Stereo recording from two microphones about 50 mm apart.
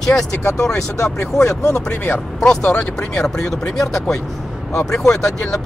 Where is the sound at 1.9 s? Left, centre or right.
Left.